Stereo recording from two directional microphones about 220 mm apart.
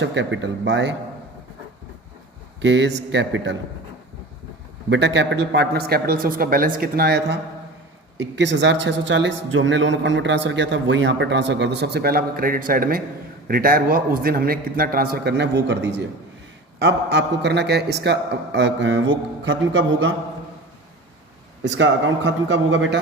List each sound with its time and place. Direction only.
0.0 s a man's voice: 55° right (ahead or behind)
2.6 s a man's voice: 55° right (ahead or behind)
4.9 s a man's voice: 55° right (ahead or behind)
21.6 s a man's voice: 55° right (ahead or behind)